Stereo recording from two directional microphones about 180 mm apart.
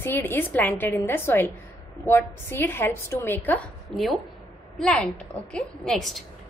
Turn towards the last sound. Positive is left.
turn(degrees=0)  # may be behind; listen again after turning